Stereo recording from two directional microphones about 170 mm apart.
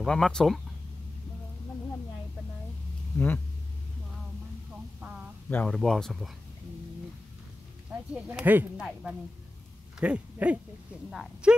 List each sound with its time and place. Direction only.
0.0 s speech: 5° left (ahead or behind)
3.1 s speech: 15° left (ahead or behind)
5.5 s speech: 10° left (ahead or behind)
8.1 s speech: 10° right (ahead or behind)